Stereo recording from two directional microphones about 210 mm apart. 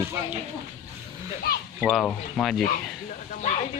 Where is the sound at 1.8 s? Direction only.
Centre (ahead or behind).